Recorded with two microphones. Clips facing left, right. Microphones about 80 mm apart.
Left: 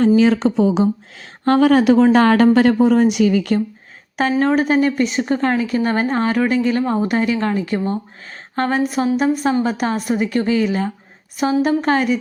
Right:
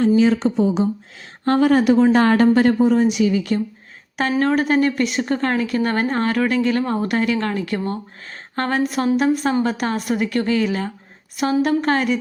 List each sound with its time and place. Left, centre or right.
0.2 s a woman's voice: left
4.2 s a woman's voice: centre